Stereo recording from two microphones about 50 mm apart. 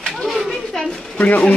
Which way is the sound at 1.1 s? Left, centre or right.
Left.